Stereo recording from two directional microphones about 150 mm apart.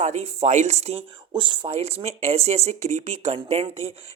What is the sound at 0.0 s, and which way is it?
Speech, 50° right (ahead or behind).